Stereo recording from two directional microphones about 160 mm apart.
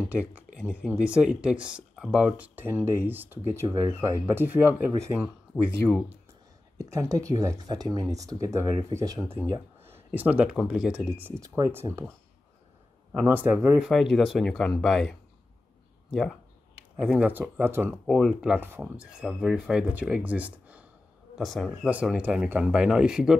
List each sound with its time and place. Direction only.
0.6 s speech: 10° left (ahead or behind)
1.0 s speech: 5° right (ahead or behind)
6.8 s speech: 20° right (ahead or behind)
10.1 s speech: 10° right (ahead or behind)
13.2 s speech: 10° right (ahead or behind)
18.0 s speech: centre (ahead or behind)
18.6 s speech: 10° right (ahead or behind)